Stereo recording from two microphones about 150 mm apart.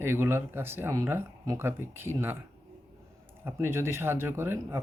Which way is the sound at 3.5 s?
15° right (ahead or behind).